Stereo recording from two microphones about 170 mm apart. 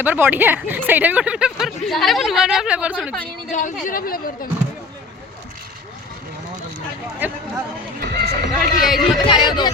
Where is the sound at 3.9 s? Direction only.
55° left (ahead or behind).